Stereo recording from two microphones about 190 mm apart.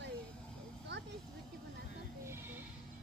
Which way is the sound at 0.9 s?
65° right (ahead or behind).